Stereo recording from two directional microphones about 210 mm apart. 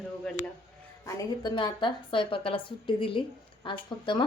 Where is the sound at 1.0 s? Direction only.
20° left (ahead or behind).